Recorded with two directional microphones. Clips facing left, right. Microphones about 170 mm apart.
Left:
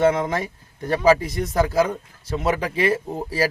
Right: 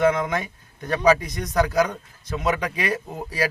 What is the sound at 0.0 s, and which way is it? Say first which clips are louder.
Speech: left 2 dB; 30° left (ahead or behind).